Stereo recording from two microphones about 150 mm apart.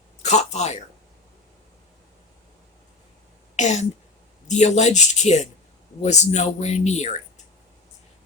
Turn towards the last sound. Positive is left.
turn(degrees=50)  # may be behind; listen again after turning